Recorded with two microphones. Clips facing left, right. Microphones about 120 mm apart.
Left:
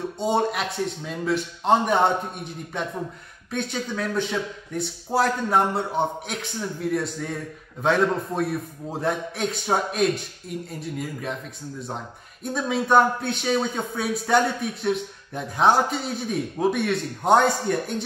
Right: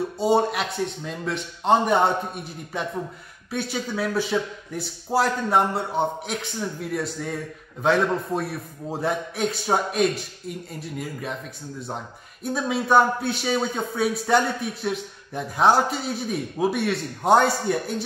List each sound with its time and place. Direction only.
0.2 s a man's voice: centre (ahead or behind)
12.5 s a man's voice: centre (ahead or behind)